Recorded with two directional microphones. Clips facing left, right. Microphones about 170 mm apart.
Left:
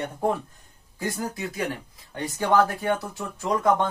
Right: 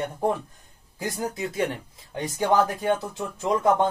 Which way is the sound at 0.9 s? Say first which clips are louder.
Even; 15° right (ahead or behind).